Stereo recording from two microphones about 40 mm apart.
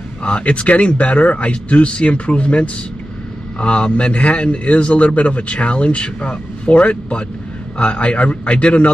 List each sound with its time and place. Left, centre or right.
0.2 s a man's voice: left